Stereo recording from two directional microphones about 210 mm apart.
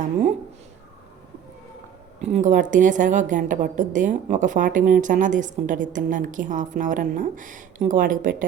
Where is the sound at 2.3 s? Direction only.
35° right (ahead or behind).